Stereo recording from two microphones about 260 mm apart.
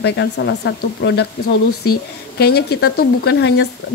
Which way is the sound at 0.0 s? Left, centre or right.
Left.